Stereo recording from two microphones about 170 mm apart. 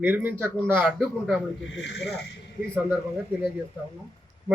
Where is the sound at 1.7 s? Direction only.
90° left.